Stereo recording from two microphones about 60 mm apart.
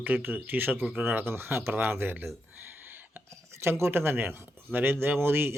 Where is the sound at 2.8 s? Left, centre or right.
Right.